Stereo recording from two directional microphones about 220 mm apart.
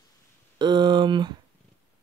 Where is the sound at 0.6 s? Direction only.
20° right (ahead or behind).